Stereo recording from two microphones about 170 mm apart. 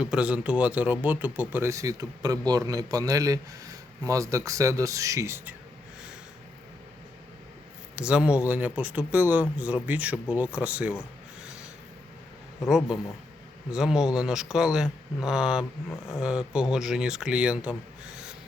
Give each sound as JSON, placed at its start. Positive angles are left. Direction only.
{"t": 0.0, "sound": "speech", "side_deg": -5}
{"t": 7.9, "sound": "speech", "side_deg": -5}
{"t": 12.6, "sound": "speech", "side_deg": 0}